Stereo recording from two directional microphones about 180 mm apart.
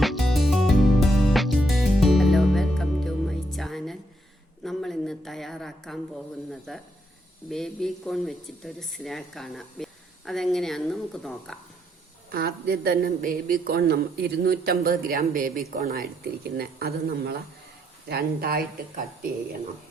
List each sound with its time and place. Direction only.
0.0 s music: centre (ahead or behind)
4.6 s a sound: centre (ahead or behind)
6.5 s speech: centre (ahead or behind)
12.3 s a woman's voice: 60° right (ahead or behind)